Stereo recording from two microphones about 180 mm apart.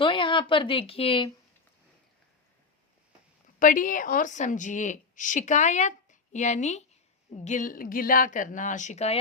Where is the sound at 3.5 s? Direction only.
50° left (ahead or behind).